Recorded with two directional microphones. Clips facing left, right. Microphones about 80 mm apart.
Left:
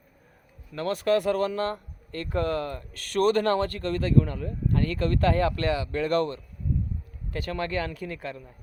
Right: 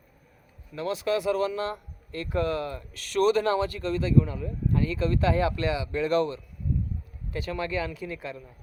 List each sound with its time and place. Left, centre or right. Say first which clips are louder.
0.7 s speech: left 3 dB; left